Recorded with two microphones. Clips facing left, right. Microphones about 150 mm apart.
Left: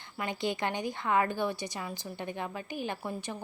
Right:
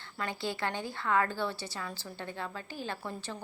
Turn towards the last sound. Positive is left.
turn(degrees=15)  # may be behind; listen again after turning